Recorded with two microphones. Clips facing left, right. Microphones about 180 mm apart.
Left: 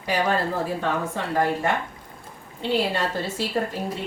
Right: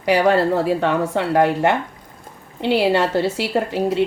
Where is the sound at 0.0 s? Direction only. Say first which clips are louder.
Right 8 dB; 70° right (ahead or behind).